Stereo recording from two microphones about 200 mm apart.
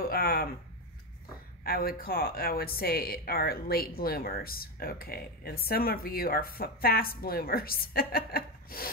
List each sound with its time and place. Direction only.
0.1 s speech: 50° left (ahead or behind)
1.6 s speech: 50° left (ahead or behind)